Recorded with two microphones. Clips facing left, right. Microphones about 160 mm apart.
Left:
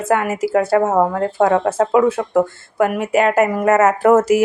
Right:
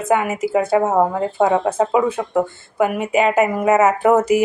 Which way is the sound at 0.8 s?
10° right (ahead or behind).